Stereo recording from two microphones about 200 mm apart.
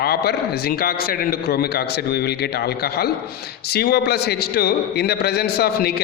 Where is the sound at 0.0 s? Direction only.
50° left (ahead or behind).